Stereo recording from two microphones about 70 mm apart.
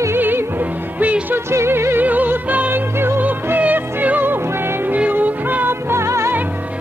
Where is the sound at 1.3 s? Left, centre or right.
Right.